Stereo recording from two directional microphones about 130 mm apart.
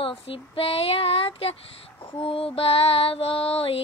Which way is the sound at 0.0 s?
45° left (ahead or behind).